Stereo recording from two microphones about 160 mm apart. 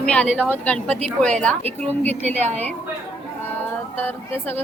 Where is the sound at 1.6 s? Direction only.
40° right (ahead or behind).